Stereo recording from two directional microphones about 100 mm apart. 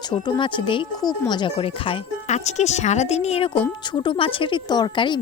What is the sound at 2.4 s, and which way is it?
Speech, 90° left.